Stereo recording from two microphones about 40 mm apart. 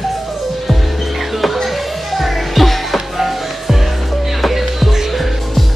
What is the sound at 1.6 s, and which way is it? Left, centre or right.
Music, centre.